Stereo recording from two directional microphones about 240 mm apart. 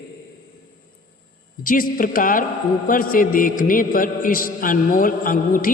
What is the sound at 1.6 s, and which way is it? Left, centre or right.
A man's voice, left.